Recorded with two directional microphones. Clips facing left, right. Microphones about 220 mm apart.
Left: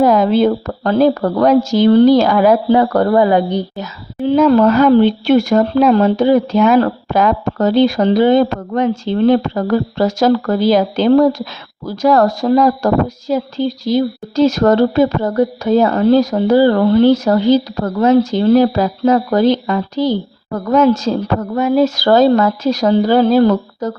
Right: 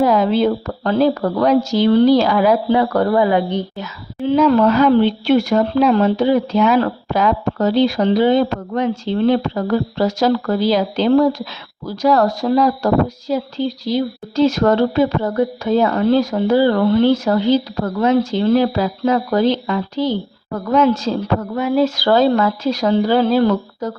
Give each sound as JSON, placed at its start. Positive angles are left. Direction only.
{"t": 0.0, "sound": "speech", "side_deg": 45}